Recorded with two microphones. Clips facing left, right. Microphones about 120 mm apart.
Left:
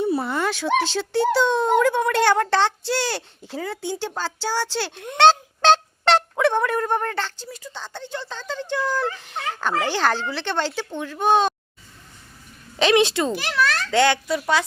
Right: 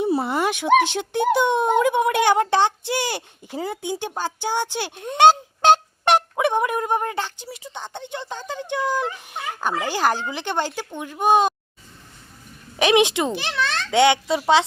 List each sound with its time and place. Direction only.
0.0 s speech: 25° right (ahead or behind)
5.1 s fowl: 10° right (ahead or behind)
7.5 s speech: 20° right (ahead or behind)
12.7 s a woman's voice: 15° right (ahead or behind)